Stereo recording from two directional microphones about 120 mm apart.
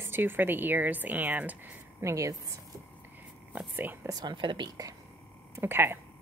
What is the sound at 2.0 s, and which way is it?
Speech, 25° right (ahead or behind).